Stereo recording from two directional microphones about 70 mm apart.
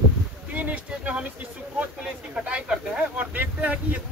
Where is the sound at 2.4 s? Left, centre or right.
Centre.